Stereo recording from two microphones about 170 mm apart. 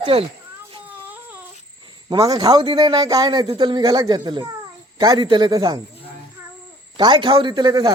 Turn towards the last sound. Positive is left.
turn(degrees=-25)  # may be behind; listen again after turning